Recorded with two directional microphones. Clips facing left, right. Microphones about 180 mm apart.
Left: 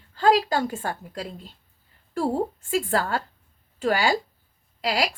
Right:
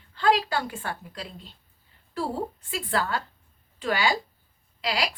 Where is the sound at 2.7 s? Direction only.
45° left (ahead or behind).